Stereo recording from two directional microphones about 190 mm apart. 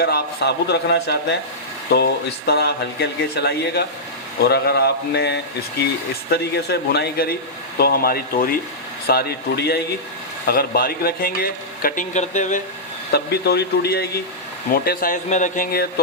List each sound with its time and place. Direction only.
0.0 s a man's voice: 55° left (ahead or behind)
2.5 s a man's voice: 60° left (ahead or behind); by 12.6 s 40° left (ahead or behind)
13.1 s a man's voice: 60° left (ahead or behind)